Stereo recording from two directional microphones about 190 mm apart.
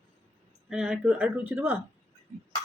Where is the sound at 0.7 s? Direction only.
5° right (ahead or behind).